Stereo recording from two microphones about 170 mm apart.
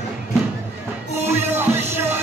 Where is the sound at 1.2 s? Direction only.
15° right (ahead or behind).